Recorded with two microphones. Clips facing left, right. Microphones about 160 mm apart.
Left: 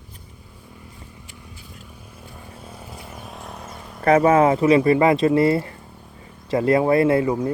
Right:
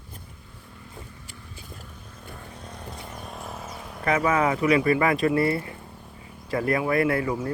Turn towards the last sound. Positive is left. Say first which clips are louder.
# left 6 dB
turn(degrees=20)  # may be behind; listen again after turning